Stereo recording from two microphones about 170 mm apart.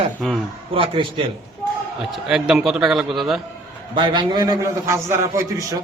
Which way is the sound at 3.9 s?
30° right (ahead or behind).